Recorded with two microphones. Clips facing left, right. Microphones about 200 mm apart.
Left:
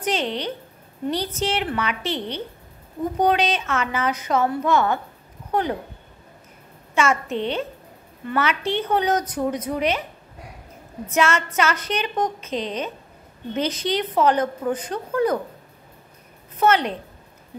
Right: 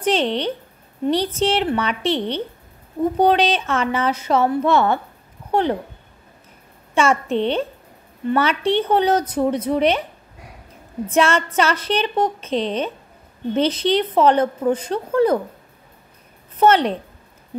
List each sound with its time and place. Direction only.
0.0 s a woman's voice: 30° right (ahead or behind)
7.0 s a woman's voice: 30° right (ahead or behind)
11.1 s a woman's voice: 30° right (ahead or behind)
16.5 s a woman's voice: 30° right (ahead or behind)